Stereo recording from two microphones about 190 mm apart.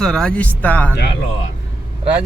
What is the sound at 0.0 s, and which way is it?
Speech, 5° left (ahead or behind).